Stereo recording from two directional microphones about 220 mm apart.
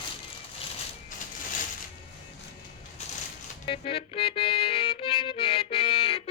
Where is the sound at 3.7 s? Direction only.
25° left (ahead or behind).